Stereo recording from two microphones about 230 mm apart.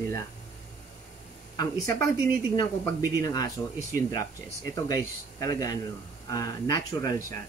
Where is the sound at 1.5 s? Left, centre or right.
Centre.